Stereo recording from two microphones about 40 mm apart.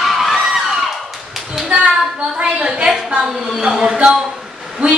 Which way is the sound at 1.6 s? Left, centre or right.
Right.